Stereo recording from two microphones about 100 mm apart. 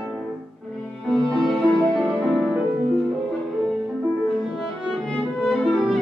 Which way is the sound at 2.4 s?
5° right (ahead or behind).